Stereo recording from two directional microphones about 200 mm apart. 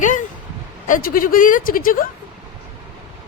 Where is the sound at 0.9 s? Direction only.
45° left (ahead or behind).